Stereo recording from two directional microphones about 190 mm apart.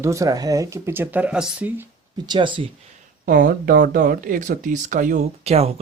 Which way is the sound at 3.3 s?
55° right (ahead or behind).